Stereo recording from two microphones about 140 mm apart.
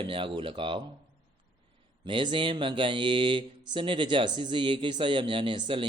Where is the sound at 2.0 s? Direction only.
35° right (ahead or behind).